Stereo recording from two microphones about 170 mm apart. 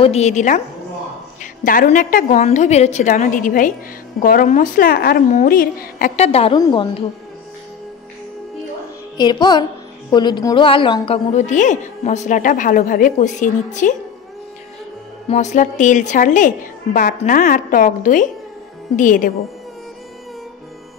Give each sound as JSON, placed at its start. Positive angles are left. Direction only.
{"t": 0.0, "sound": "a woman's voice", "side_deg": 40}
{"t": 2.4, "sound": "a woman's voice", "side_deg": 40}
{"t": 6.1, "sound": "a woman's voice", "side_deg": 35}
{"t": 9.1, "sound": "a woman's voice", "side_deg": 25}
{"t": 11.3, "sound": "a woman's voice", "side_deg": 45}
{"t": 15.2, "sound": "a woman's voice", "side_deg": 45}